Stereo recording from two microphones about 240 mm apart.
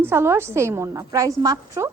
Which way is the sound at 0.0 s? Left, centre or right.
Centre.